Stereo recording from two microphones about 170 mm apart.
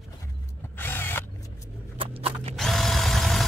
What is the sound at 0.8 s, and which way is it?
Drill, 10° left (ahead or behind).